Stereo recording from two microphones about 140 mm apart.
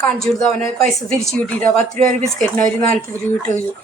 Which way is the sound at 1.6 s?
75° right (ahead or behind).